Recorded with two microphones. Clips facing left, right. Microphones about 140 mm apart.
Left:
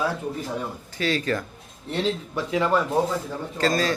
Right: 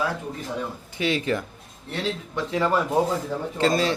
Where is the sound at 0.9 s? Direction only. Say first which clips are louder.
Right 1 dB; 20° right (ahead or behind).